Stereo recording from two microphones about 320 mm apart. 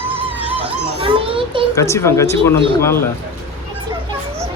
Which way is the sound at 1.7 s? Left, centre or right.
Centre.